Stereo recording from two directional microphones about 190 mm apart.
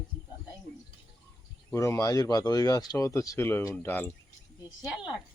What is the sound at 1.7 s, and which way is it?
Speech, 15° left (ahead or behind).